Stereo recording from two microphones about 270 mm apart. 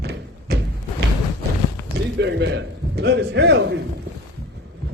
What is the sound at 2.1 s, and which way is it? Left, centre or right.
A man's voice, right.